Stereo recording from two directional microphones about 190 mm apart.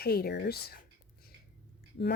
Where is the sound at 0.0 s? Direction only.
55° left (ahead or behind).